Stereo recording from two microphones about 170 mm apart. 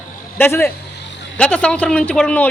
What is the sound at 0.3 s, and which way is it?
A man's voice, 15° left (ahead or behind).